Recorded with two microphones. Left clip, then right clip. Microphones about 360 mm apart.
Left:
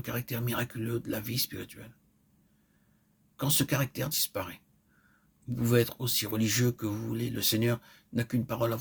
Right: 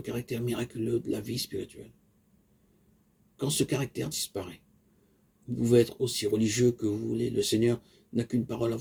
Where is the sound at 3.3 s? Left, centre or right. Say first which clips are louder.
Right 1 dB; left.